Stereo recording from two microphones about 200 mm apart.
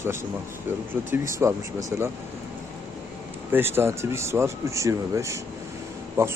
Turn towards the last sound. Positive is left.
turn(degrees=-10)  # may be behind; listen again after turning